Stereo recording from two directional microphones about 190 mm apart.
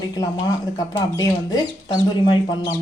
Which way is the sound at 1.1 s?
20° left (ahead or behind).